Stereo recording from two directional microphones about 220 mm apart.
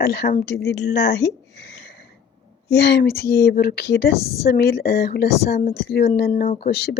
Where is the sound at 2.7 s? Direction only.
50° left (ahead or behind).